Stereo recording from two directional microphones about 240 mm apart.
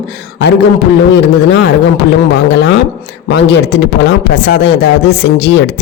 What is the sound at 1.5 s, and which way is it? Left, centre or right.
Speech, left.